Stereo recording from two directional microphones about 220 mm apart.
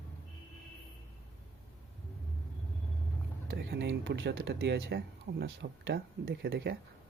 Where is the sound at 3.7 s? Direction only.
50° right (ahead or behind).